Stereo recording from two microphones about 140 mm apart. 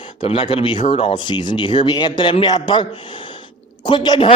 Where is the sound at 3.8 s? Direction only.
30° left (ahead or behind).